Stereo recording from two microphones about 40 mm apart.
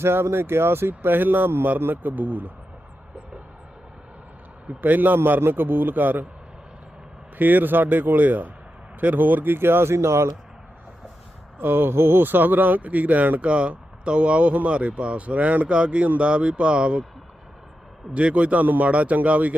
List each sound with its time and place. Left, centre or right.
0.0 s speech: right
2.0 s speech: right
4.8 s a man's voice: right
7.3 s a man's voice: right
11.6 s a man's voice: right
12.8 s speech: right
13.4 s speech: right
18.1 s speech: right
18.6 s speech: right
18.9 s speech: right